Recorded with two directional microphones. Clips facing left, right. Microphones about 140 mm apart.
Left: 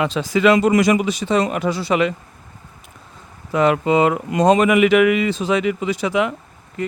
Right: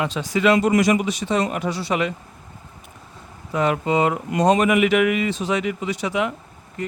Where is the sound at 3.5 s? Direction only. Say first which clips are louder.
Left 4 dB; 90° left.